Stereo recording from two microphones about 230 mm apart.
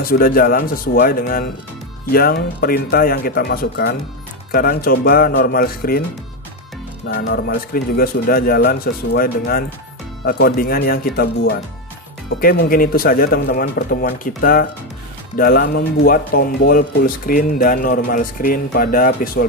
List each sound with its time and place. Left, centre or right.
0.0 s speech: left
7.1 s speech: left